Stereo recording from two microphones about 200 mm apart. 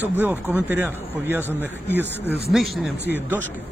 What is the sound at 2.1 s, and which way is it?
Speech, 10° left (ahead or behind).